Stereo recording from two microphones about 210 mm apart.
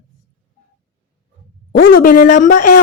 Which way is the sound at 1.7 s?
45° left (ahead or behind).